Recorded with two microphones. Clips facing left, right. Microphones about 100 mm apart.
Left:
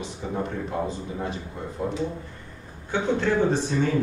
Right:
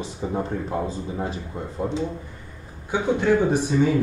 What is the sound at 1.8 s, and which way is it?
Speech, 25° right (ahead or behind).